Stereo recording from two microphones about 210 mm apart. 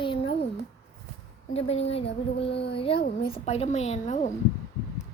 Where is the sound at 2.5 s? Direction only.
55° left (ahead or behind).